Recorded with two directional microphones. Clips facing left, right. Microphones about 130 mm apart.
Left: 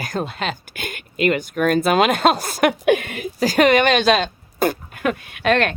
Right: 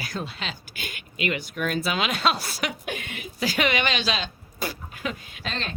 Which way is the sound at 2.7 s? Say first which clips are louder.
Left 16 dB; 70° left (ahead or behind).